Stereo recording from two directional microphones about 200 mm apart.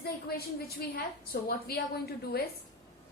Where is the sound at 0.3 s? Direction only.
50° left (ahead or behind).